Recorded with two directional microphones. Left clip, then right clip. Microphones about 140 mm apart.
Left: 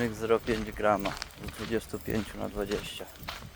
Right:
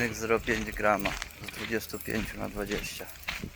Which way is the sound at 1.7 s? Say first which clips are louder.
Left 1 dB; 25° left (ahead or behind).